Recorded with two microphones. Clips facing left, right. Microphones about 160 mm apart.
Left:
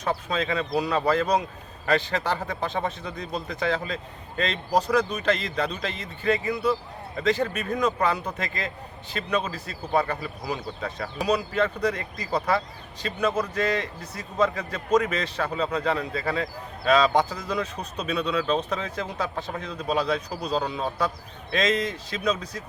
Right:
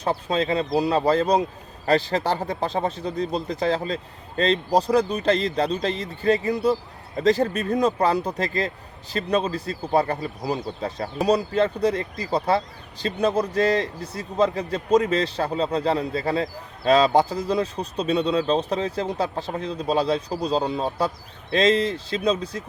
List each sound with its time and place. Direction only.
0.0 s speech: 30° right (ahead or behind)